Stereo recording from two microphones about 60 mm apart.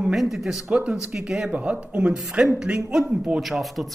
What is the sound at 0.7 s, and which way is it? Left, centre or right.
A woman's voice, centre.